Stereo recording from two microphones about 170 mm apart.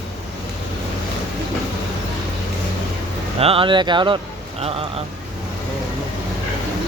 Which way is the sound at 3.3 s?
35° right (ahead or behind).